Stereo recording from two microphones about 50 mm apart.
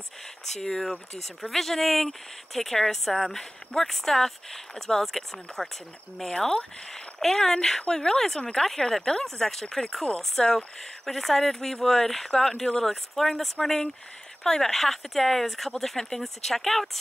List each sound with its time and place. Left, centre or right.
0.6 s speech: centre
8.6 s speech: centre